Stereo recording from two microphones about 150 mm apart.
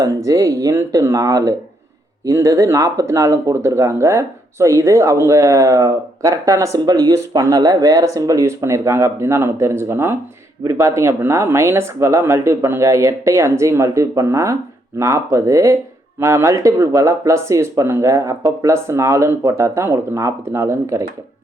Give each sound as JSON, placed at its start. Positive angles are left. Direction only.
{"t": 0.0, "sound": "speech", "side_deg": -20}